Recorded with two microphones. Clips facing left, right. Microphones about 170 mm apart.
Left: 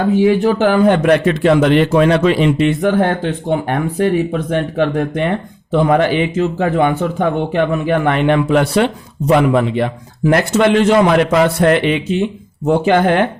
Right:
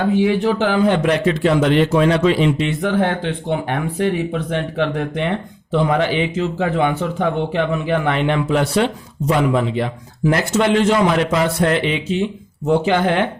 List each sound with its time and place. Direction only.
0.1 s a man's voice: 45° left (ahead or behind)